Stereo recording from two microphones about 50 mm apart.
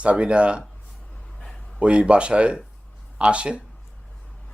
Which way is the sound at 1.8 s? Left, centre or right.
Right.